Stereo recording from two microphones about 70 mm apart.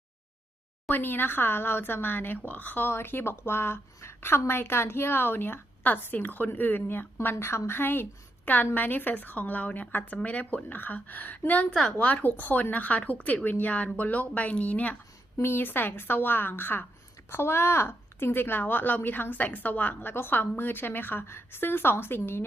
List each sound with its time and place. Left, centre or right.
0.9 s a woman's voice: left
11.7 s a woman's voice: centre
11.9 s a woman's voice: left
15.4 s a woman's voice: left